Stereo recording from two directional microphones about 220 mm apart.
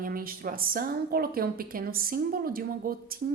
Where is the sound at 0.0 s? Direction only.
40° right (ahead or behind).